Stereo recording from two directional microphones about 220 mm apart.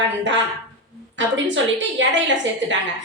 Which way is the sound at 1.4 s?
55° right (ahead or behind).